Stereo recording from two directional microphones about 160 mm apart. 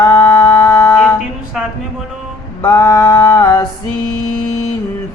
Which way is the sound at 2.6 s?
20° left (ahead or behind).